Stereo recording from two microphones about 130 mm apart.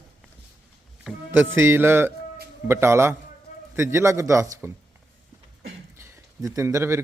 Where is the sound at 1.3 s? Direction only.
15° right (ahead or behind).